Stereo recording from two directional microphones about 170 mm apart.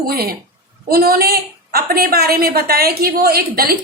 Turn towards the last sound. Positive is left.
turn(degrees=-60)  # may be behind; listen again after turning